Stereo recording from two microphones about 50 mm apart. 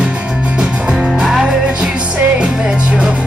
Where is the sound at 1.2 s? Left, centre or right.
Centre.